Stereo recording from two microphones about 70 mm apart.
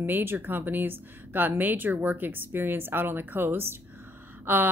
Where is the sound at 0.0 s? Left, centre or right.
Right.